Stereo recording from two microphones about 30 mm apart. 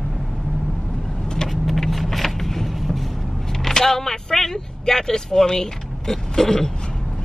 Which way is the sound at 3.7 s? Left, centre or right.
Centre.